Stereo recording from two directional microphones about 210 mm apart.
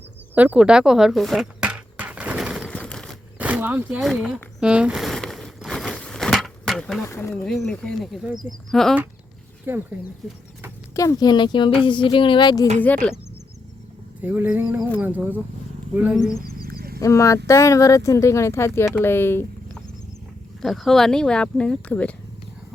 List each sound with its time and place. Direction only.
0.3 s a sound: 5° right (ahead or behind)
3.3 s speech: 5° right (ahead or behind)
4.6 s a sound: 5° right (ahead or behind)
7.0 s speech: 10° left (ahead or behind)
9.7 s speech: 10° right (ahead or behind)
10.2 s speech: centre (ahead or behind)
10.9 s speech: 15° left (ahead or behind)
12.8 s speech: 10° left (ahead or behind)
14.2 s speech: 10° right (ahead or behind)
16.4 s wild animals: 45° right (ahead or behind)
17.0 s speech: 15° left (ahead or behind)